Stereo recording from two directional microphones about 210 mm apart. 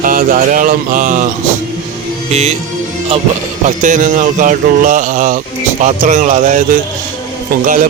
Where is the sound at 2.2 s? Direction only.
30° right (ahead or behind).